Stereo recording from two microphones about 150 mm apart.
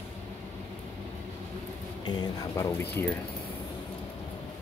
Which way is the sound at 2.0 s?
25° left (ahead or behind).